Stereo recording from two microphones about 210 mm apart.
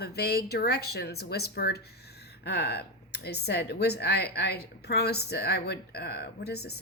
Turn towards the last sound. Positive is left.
turn(degrees=50)  # may be behind; listen again after turning